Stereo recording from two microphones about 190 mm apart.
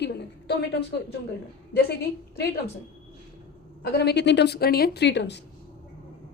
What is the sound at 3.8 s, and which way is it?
Speech, 60° left (ahead or behind).